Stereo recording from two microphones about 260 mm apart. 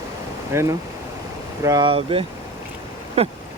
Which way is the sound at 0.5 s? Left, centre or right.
Centre.